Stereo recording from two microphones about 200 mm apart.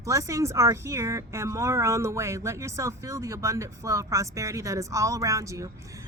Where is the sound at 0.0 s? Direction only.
15° right (ahead or behind).